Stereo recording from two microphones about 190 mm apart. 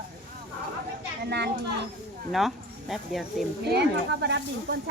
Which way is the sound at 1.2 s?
60° right (ahead or behind).